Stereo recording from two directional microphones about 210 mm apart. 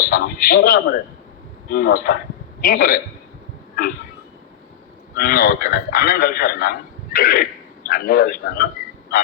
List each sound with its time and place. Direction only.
0.1 s a man's voice: 45° left (ahead or behind)
5.1 s a man's voice: 45° left (ahead or behind)